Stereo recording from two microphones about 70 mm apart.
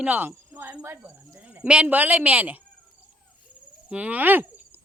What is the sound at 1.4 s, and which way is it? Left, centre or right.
Cricket, centre.